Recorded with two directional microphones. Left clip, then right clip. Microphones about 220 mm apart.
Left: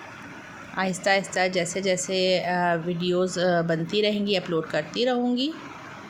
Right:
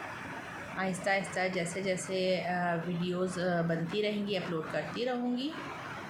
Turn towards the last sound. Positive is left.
turn(degrees=40)  # may be behind; listen again after turning